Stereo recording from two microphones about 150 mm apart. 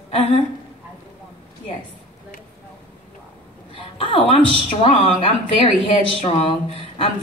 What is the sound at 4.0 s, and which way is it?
Speech, 35° left (ahead or behind).